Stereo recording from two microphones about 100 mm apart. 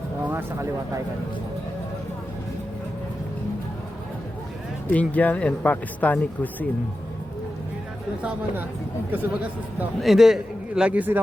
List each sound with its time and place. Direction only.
0.3 s speech: 20° right (ahead or behind)
4.9 s speech: 15° left (ahead or behind)
10.0 s a man's voice: centre (ahead or behind)